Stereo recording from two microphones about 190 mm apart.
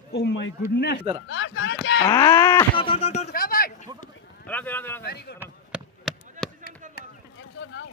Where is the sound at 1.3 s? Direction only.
75° left (ahead or behind).